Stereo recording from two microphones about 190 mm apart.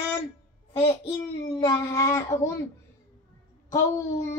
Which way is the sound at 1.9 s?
15° left (ahead or behind).